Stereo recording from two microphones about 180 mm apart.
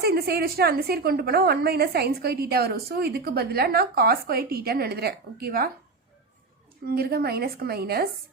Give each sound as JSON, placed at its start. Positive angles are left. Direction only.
{"t": 0.0, "sound": "a woman's voice", "side_deg": -60}
{"t": 6.8, "sound": "a woman's voice", "side_deg": -60}